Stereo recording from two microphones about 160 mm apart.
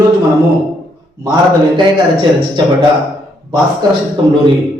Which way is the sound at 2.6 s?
30° right (ahead or behind).